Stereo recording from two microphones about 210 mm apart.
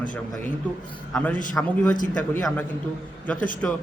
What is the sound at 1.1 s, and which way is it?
A man's voice, 5° left (ahead or behind).